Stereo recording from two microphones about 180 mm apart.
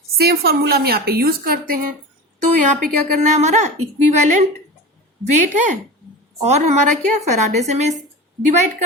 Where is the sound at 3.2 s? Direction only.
40° right (ahead or behind).